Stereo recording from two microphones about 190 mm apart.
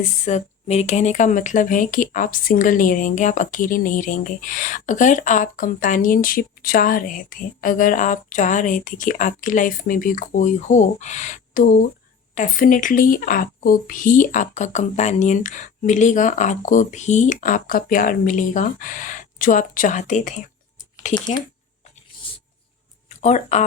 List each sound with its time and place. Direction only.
0.3 s speech: 35° left (ahead or behind)
23.0 s speech: 40° left (ahead or behind)